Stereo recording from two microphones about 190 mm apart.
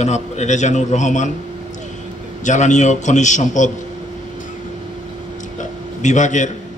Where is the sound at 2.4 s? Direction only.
40° left (ahead or behind).